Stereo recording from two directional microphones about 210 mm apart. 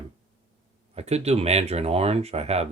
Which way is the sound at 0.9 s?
30° right (ahead or behind).